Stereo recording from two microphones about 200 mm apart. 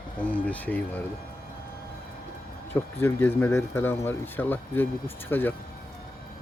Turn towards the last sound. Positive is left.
turn(degrees=10)  # may be behind; listen again after turning